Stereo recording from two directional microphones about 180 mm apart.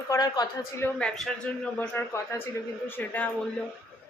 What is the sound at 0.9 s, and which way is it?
A man's voice, 5° left (ahead or behind).